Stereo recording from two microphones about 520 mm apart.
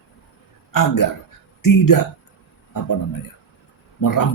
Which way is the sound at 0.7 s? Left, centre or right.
Left.